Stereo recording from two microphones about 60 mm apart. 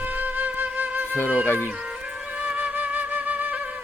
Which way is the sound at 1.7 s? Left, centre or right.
Centre.